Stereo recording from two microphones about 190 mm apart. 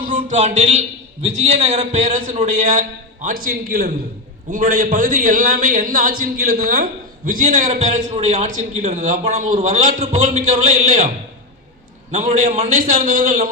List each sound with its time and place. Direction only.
0.1 s a man's voice: 40° right (ahead or behind)
12.1 s a man's voice: 40° right (ahead or behind)